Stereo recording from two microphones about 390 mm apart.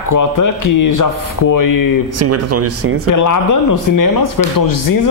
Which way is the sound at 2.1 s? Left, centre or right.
Right.